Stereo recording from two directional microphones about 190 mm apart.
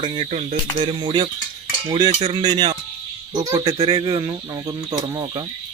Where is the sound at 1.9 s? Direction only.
35° right (ahead or behind).